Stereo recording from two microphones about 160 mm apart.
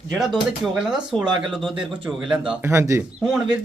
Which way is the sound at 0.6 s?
5° right (ahead or behind).